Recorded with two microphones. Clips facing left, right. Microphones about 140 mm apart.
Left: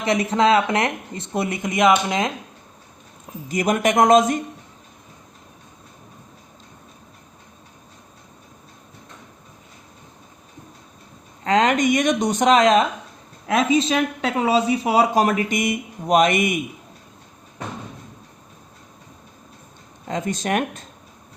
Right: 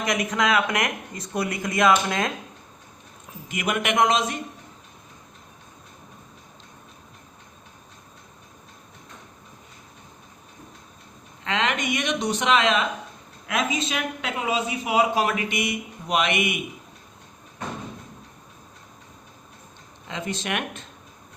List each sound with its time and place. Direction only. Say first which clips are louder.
0.0 s speech: left 6 dB; 30° left (ahead or behind)
3.5 s speech: left 6 dB; 40° left (ahead or behind)
11.4 s speech: left 8 dB; 40° left (ahead or behind)
20.1 s speech: left 6 dB; 45° left (ahead or behind)